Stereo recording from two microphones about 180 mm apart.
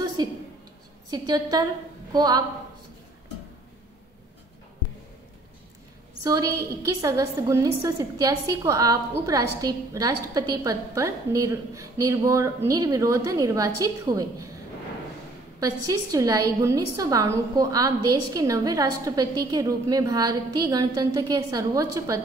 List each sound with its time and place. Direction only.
0.2 s a woman's voice: 25° right (ahead or behind)
6.2 s a woman's voice: 20° right (ahead or behind)
15.6 s a woman's voice: 20° right (ahead or behind)